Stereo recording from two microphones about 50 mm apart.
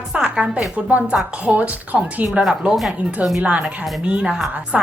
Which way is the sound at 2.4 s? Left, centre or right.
Centre.